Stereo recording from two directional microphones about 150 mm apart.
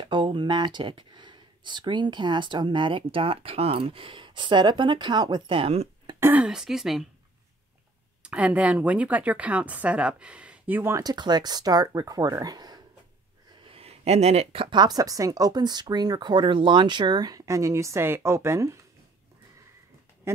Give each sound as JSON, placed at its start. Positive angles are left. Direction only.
{"t": 0.0, "sound": "speech", "side_deg": -30}
{"t": 6.1, "sound": "speech", "side_deg": -15}
{"t": 6.4, "sound": "speech", "side_deg": -5}
{"t": 8.2, "sound": "a woman's voice", "side_deg": -10}
{"t": 13.7, "sound": "speech", "side_deg": -40}
{"t": 20.3, "sound": "speech", "side_deg": -15}